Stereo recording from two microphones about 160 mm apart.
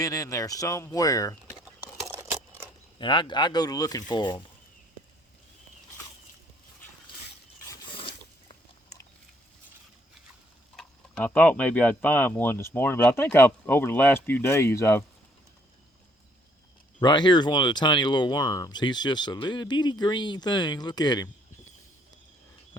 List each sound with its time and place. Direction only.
0.0 s speech: 20° left (ahead or behind)
2.1 s a sound: 10° right (ahead or behind)
3.0 s speech: 30° left (ahead or behind)
7.9 s zipper: 35° left (ahead or behind)
10.8 s speech: 10° left (ahead or behind)
17.0 s speech: 30° left (ahead or behind)